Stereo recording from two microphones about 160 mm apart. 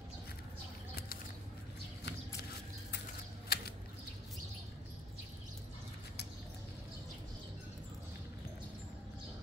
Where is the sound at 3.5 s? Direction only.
80° left.